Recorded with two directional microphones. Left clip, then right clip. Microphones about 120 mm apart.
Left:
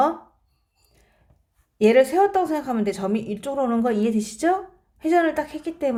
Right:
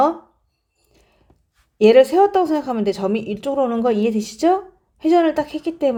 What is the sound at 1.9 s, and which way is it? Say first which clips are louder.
Speech: right 4 dB; 25° right (ahead or behind).